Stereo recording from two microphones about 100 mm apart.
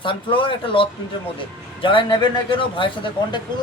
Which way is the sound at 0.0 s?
60° left (ahead or behind).